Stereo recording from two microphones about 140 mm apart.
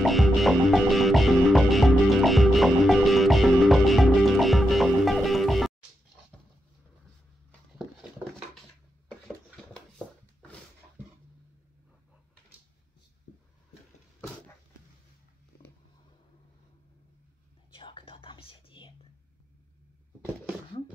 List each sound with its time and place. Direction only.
0.0 s music: centre (ahead or behind)
17.7 s whispering: 40° left (ahead or behind)